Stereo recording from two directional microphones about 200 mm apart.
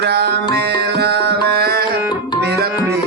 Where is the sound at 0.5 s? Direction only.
55° right (ahead or behind).